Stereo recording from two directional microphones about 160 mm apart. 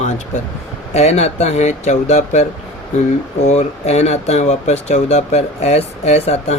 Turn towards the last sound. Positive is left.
turn(degrees=40)  # may be behind; listen again after turning